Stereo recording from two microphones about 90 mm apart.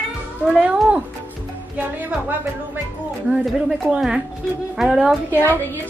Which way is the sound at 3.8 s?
5° right (ahead or behind).